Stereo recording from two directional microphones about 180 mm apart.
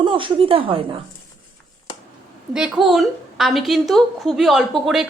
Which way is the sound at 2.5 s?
5° right (ahead or behind).